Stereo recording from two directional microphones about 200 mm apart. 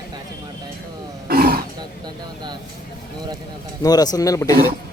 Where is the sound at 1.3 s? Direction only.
50° right (ahead or behind).